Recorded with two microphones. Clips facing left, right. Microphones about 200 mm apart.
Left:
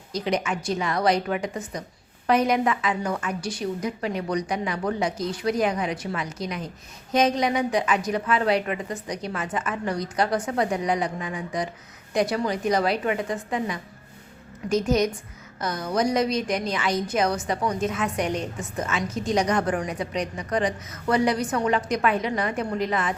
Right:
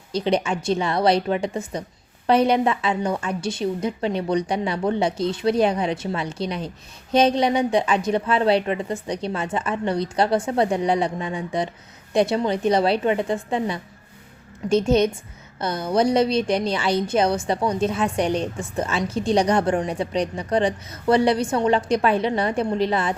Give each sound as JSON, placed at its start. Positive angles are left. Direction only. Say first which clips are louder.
{"t": 0.1, "sound": "a woman's voice", "louder": "right 4 dB", "side_deg": -30}